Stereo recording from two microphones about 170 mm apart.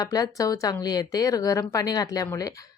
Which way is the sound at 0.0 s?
20° left (ahead or behind).